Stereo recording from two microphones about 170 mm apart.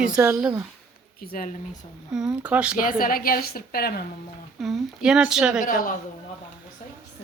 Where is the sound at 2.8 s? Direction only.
55° left (ahead or behind).